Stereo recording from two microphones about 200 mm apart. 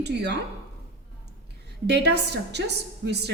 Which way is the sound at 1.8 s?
55° right (ahead or behind).